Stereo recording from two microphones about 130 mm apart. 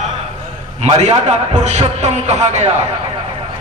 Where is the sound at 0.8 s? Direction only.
60° right (ahead or behind).